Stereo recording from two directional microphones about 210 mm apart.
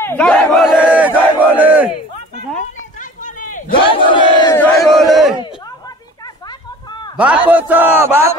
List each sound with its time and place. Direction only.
0.0 s battle cry: 10° left (ahead or behind); by 1.9 s 10° right (ahead or behind)
3.0 s run: 40° left (ahead or behind)
3.7 s battle cry: 25° left (ahead or behind)
4.6 s battle cry: centre (ahead or behind)
6.2 s a sound: 20° left (ahead or behind)
7.2 s a man's voice: 5° right (ahead or behind)